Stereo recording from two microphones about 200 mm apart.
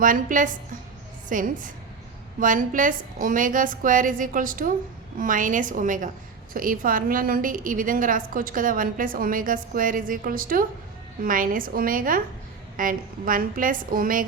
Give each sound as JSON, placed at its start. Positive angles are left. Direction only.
{"t": 0.0, "sound": "a woman's voice", "side_deg": -40}